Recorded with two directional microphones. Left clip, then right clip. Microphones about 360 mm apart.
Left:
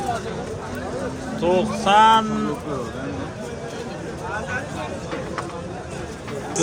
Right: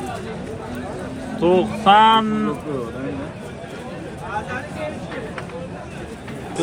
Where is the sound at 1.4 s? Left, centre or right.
Centre.